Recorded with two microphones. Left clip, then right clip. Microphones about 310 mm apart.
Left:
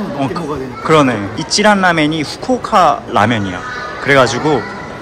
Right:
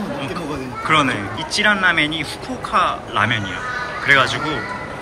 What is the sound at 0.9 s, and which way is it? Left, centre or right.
Speech, centre.